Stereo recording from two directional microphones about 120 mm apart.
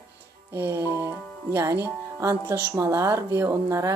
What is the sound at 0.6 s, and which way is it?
Speech, 20° right (ahead or behind).